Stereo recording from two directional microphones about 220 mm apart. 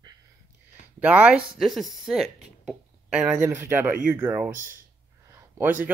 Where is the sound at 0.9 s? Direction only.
5° right (ahead or behind).